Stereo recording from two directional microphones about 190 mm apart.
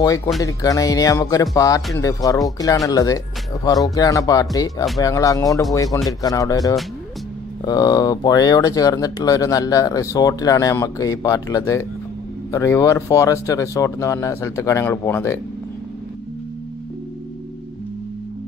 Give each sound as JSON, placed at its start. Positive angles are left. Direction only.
{"t": 0.0, "sound": "speech", "side_deg": 20}